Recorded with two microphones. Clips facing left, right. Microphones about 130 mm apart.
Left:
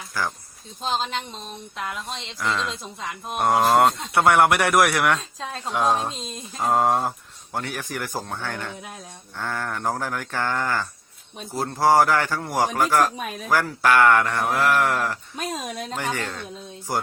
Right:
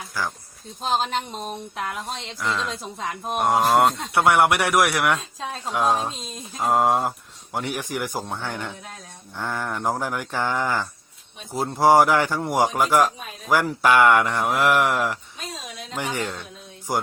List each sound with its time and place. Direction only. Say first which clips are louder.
0.9 s a sound: right 3 dB; 45° right (ahead or behind)
2.4 s mantra: left 1 dB; centre (ahead or behind)
3.8 s speech: even; 5° right (ahead or behind)
6.5 s mantra: right 1 dB; 5° right (ahead or behind)
7.5 s speech: right 2 dB; 15° right (ahead or behind)
13.1 s speech: left 7 dB; 65° left (ahead or behind)
13.5 s speech: right 1 dB; 15° right (ahead or behind)
15.4 s speech: left 7 dB; 55° left (ahead or behind)
16.1 s speech: right 1 dB; 15° right (ahead or behind)